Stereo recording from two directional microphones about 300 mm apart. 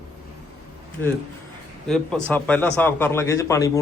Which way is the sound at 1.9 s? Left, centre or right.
Centre.